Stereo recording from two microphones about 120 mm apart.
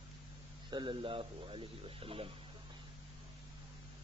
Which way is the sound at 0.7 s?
40° right (ahead or behind).